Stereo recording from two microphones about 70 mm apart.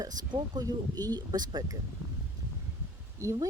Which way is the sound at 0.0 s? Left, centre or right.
Right.